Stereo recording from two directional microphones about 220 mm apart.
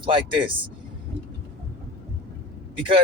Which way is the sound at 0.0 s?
25° right (ahead or behind).